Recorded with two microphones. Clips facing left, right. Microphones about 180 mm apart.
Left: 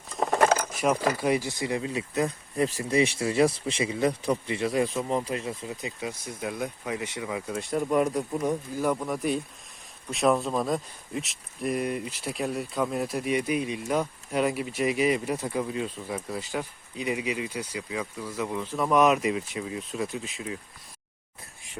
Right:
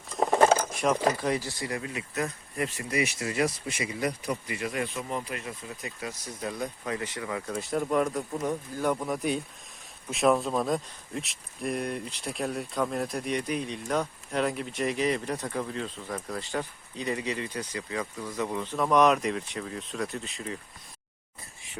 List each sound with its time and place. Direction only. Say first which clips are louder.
0.1 s a sound: right 1 dB; centre (ahead or behind)
1.2 s speech: left 3 dB; 15° left (ahead or behind)
7.5 s speech: left 2 dB; centre (ahead or behind)